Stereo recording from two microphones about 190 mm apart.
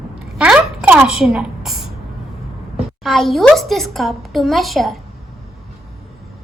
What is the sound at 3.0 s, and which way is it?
A woman's voice, centre (ahead or behind).